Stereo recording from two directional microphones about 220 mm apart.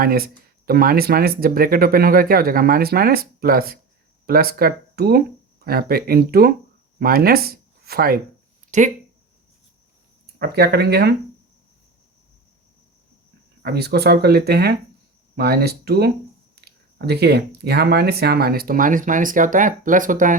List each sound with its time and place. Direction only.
0.0 s speech: 40° right (ahead or behind)
10.3 s speech: 50° right (ahead or behind)
13.6 s speech: 45° right (ahead or behind)